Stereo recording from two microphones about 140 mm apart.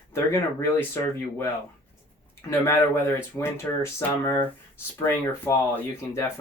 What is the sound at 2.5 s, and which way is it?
Speech, 20° left (ahead or behind).